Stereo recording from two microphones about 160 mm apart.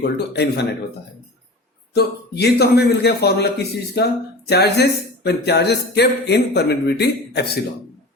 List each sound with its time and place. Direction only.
0.0 s a man's voice: 90° left
1.9 s a man's voice: 90° left